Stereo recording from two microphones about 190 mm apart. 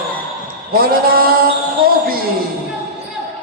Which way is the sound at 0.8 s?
50° right (ahead or behind).